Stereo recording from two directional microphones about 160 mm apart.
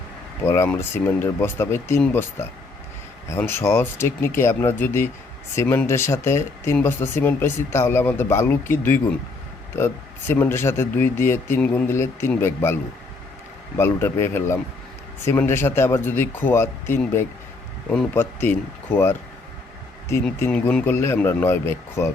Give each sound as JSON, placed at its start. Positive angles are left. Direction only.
{"t": 0.4, "sound": "speech", "side_deg": 15}
{"t": 20.4, "sound": "speech", "side_deg": 10}